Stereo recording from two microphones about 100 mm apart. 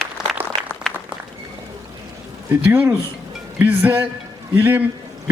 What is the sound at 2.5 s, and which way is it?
A man's voice, 25° right (ahead or behind).